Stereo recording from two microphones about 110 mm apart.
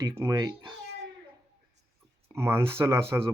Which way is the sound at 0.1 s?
25° right (ahead or behind).